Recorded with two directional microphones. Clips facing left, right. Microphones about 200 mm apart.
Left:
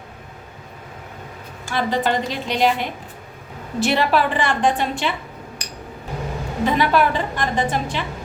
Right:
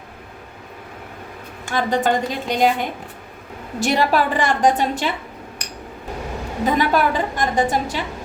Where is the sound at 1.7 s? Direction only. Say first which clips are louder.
Right 2 dB; 45° right (ahead or behind).